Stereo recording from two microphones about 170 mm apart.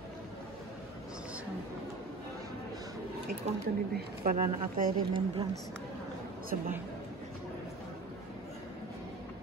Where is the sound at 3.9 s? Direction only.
55° right (ahead or behind).